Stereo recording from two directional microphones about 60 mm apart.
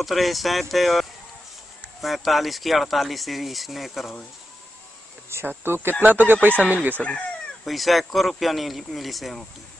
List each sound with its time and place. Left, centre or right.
0.0 s speech: centre
5.6 s speech: right
7.0 s speech: left
7.6 s speech: centre